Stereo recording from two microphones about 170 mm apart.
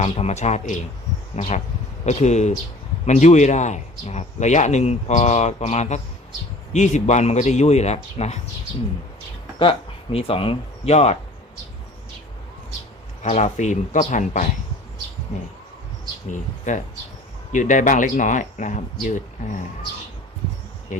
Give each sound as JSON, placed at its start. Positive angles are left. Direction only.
{"t": 0.0, "sound": "a man's voice", "side_deg": 40}
{"t": 9.6, "sound": "speech", "side_deg": 35}
{"t": 13.2, "sound": "a man's voice", "side_deg": 45}
{"t": 16.3, "sound": "a man's voice", "side_deg": 45}
{"t": 20.9, "sound": "a man's voice", "side_deg": 45}